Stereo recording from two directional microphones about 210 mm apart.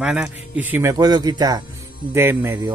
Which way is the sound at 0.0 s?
5° right (ahead or behind).